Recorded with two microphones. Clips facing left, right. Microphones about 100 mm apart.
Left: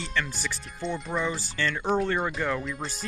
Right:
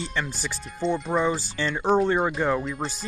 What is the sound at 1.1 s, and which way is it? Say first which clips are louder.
Speech: right 5 dB; 35° right (ahead or behind).